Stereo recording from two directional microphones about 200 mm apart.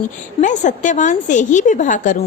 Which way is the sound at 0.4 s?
40° left (ahead or behind).